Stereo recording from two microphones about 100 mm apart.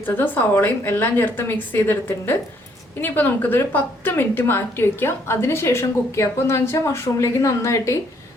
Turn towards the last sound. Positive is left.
turn(degrees=30)  # may be behind; listen again after turning